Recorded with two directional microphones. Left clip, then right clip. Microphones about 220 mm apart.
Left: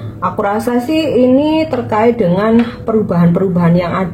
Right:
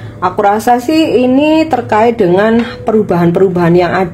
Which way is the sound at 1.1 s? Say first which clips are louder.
Even; 50° right (ahead or behind).